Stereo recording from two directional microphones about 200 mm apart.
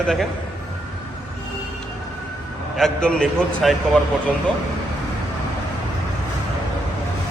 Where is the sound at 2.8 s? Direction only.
5° left (ahead or behind).